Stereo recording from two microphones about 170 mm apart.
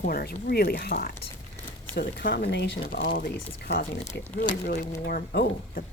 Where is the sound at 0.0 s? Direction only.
65° left (ahead or behind).